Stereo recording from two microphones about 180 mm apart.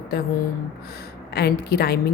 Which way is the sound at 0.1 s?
55° left (ahead or behind).